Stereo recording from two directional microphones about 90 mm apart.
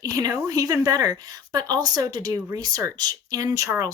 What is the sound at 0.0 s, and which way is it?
Speech, 45° right (ahead or behind).